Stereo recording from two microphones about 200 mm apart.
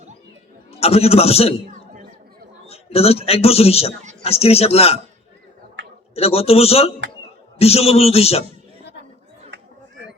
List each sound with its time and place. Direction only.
0.8 s a man's voice: 30° left (ahead or behind)
2.6 s a man's voice: 30° left (ahead or behind)
5.8 s a sound: 60° right (ahead or behind)
6.1 s a man's voice: 30° left (ahead or behind)
9.5 s chatter: 60° right (ahead or behind)